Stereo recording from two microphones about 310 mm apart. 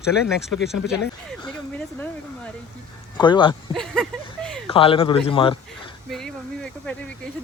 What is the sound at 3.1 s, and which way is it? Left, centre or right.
Speech, centre.